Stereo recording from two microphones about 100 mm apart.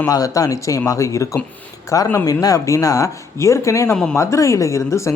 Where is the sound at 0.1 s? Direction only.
35° left (ahead or behind).